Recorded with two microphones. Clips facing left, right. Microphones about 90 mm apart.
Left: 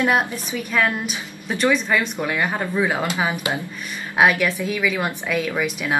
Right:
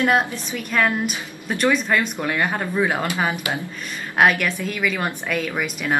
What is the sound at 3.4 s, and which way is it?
Speech, 25° left (ahead or behind).